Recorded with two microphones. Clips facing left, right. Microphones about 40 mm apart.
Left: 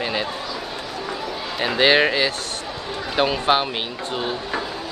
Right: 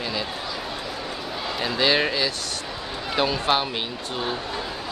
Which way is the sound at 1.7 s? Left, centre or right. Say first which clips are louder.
Left 5 dB; left.